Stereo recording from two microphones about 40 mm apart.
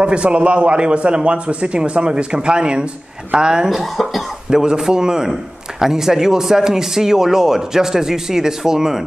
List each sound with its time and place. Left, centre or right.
0.0 s a man's voice: right
3.7 s speech: centre
4.5 s a man's voice: centre